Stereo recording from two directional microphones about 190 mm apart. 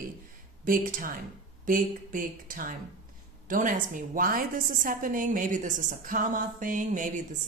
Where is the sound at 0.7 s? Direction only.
45° right (ahead or behind).